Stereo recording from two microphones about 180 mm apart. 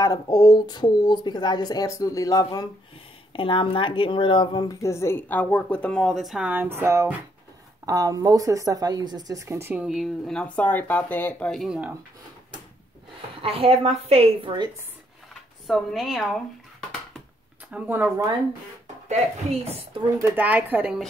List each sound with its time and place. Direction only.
0.0 s a woman's voice: 20° left (ahead or behind); by 11.9 s 5° right (ahead or behind)
13.4 s a woman's voice: 30° right (ahead or behind)
15.6 s speech: centre (ahead or behind)
17.6 s speech: 10° right (ahead or behind)
19.0 s a woman's voice: 35° right (ahead or behind)
20.2 s speech: 10° right (ahead or behind)